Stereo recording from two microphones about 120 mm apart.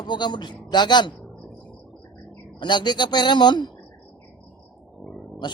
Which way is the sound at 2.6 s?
40° left (ahead or behind).